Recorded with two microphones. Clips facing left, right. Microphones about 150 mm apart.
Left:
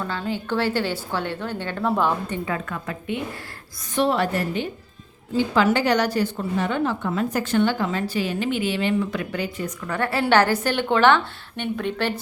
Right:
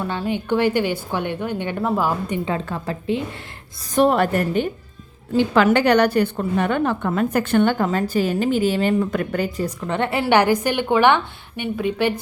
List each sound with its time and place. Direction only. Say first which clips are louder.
0.0 s a woman's voice: right 3 dB; 15° right (ahead or behind)
2.5 s a woman's voice: right 4 dB; 30° right (ahead or behind)
3.9 s a woman's voice: right 4 dB; 50° right (ahead or behind)
5.5 s a woman's voice: right 4 dB; 60° right (ahead or behind); by 9.7 s 40° right (ahead or behind)
9.8 s a woman's voice: right 1 dB; 25° right (ahead or behind)